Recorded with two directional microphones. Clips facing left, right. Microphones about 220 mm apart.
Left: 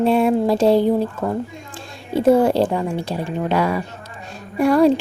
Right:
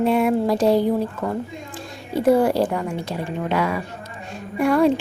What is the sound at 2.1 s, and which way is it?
A woman's voice, 25° left (ahead or behind).